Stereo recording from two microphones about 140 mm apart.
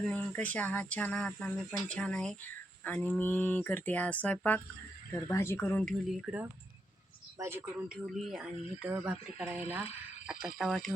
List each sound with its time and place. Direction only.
0.0 s speech: 5° left (ahead or behind)
5.1 s speech: 20° left (ahead or behind)
6.3 s speech: 5° right (ahead or behind)
7.3 s speech: 20° right (ahead or behind)
7.9 s speech: 5° right (ahead or behind)
10.6 s speech: centre (ahead or behind)